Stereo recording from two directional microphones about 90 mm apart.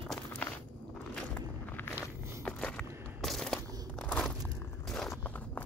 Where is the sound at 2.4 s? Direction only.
10° left (ahead or behind).